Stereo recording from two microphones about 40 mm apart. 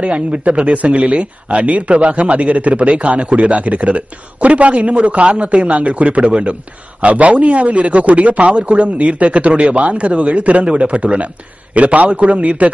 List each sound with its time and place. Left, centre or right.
0.0 s speech: right